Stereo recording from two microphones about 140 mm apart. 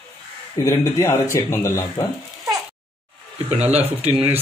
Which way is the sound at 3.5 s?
50° right (ahead or behind).